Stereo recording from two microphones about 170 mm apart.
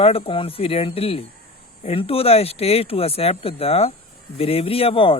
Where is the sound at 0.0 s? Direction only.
35° left (ahead or behind).